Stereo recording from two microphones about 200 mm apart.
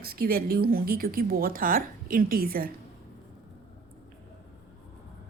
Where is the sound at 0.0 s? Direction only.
50° right (ahead or behind).